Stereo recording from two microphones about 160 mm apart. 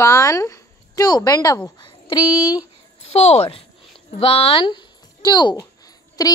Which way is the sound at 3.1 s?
40° left (ahead or behind).